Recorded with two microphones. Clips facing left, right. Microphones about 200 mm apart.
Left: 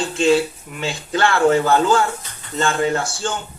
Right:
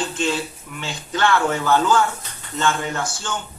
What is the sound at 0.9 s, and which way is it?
Speech, 30° left (ahead or behind).